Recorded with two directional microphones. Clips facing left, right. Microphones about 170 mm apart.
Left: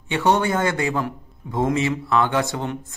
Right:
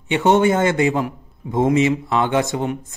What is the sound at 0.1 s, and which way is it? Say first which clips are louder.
A man's voice: right 4 dB; 20° right (ahead or behind).